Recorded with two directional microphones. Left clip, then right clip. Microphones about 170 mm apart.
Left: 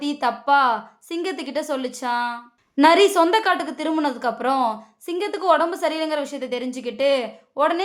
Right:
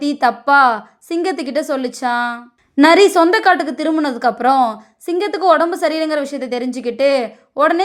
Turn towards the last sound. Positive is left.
turn(degrees=-25)  # may be behind; listen again after turning